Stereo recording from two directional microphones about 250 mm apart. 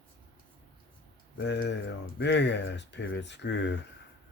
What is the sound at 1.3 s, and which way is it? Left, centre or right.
Speech, left.